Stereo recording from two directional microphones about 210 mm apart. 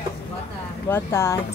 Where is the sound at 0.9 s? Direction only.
15° left (ahead or behind).